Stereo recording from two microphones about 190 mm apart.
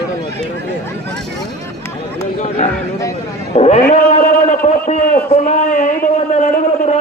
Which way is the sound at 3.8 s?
45° left (ahead or behind).